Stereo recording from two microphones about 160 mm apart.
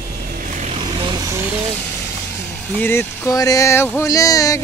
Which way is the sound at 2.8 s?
15° left (ahead or behind).